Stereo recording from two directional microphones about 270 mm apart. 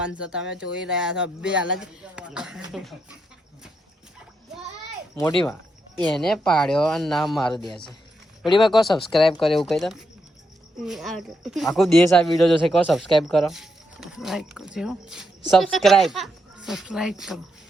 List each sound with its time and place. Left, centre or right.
0.0 s speech: centre
5.1 s speech: centre
8.4 s speech: centre
8.8 s speech: centre